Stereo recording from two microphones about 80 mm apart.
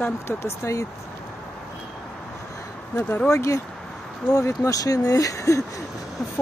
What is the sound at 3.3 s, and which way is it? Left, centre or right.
Speech, left.